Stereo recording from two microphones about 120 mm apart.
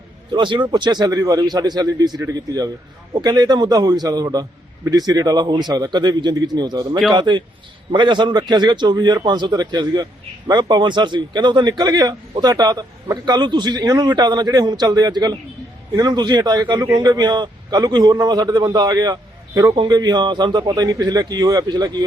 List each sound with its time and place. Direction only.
0.3 s a man's voice: 40° right (ahead or behind)
3.2 s a man's voice: 35° right (ahead or behind)